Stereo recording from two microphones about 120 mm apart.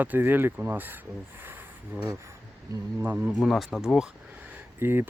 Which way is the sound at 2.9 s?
20° right (ahead or behind).